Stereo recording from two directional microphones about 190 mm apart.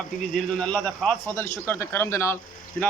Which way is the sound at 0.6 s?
5° left (ahead or behind).